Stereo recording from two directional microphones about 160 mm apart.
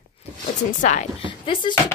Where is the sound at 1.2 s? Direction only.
30° left (ahead or behind).